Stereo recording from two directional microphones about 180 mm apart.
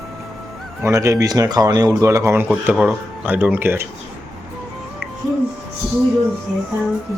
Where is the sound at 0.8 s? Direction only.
15° right (ahead or behind).